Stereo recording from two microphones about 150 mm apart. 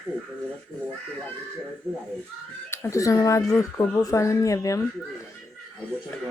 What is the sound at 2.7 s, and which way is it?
Speech, 20° left (ahead or behind).